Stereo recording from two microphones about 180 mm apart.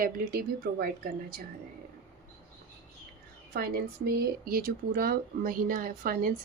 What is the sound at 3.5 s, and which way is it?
Speech, 60° right (ahead or behind).